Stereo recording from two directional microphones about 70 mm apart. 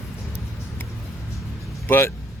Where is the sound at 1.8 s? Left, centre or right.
Left.